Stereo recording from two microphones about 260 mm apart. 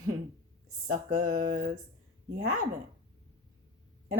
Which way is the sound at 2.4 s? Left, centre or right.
Right.